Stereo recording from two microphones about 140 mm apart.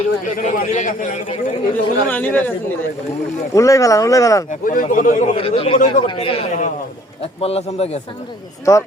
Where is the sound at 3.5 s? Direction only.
20° left (ahead or behind).